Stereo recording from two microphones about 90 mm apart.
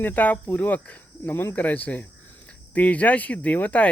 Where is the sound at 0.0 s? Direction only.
20° left (ahead or behind).